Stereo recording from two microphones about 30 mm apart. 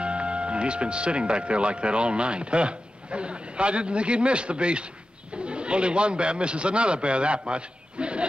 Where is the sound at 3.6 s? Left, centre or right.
Right.